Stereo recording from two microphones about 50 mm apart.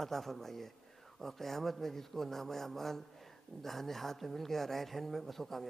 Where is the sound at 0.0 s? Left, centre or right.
Centre.